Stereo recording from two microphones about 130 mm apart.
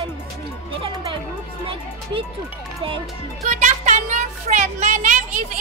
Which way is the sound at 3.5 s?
70° right (ahead or behind).